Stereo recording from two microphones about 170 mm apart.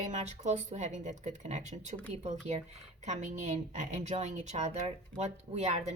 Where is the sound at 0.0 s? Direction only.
45° right (ahead or behind).